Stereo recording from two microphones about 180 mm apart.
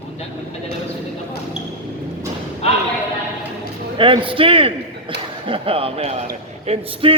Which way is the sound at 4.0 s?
30° right (ahead or behind).